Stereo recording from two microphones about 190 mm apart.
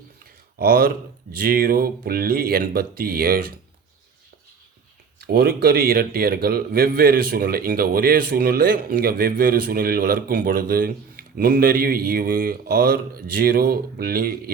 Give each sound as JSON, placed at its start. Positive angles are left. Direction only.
{"t": 0.6, "sound": "speech", "side_deg": -50}
{"t": 5.2, "sound": "speech", "side_deg": -55}